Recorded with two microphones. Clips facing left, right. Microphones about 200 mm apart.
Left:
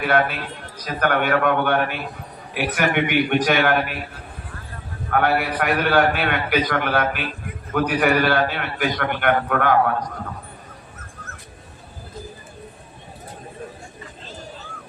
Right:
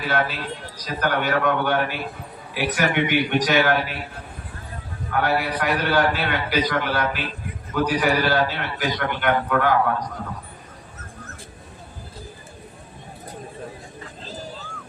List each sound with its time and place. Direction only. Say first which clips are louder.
0.0 s a man's voice: left 4 dB; 60° left (ahead or behind)
5.1 s a man's voice: left 2 dB; 55° left (ahead or behind)